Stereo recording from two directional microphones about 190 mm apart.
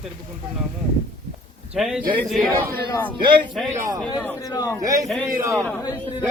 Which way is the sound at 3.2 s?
25° right (ahead or behind).